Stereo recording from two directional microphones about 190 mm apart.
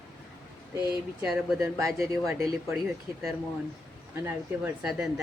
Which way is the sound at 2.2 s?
15° right (ahead or behind).